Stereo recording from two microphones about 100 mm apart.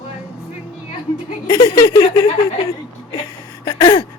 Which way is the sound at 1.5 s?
35° left (ahead or behind).